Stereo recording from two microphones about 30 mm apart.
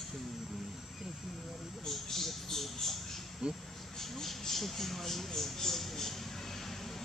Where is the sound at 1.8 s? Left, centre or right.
Centre.